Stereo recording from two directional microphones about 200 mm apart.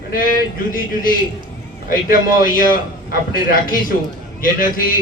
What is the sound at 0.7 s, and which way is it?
A man's voice, 45° left (ahead or behind).